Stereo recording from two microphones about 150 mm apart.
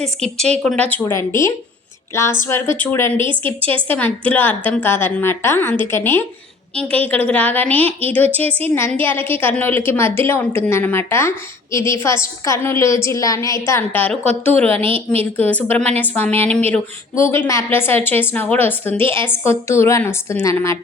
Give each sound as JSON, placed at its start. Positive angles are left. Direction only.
{"t": 0.6, "sound": "a woman's voice", "side_deg": 10}
{"t": 14.7, "sound": "a woman's voice", "side_deg": -40}
{"t": 15.4, "sound": "a woman's voice", "side_deg": 10}
{"t": 15.7, "sound": "a woman's voice", "side_deg": -45}
{"t": 16.0, "sound": "a woman's voice", "side_deg": 15}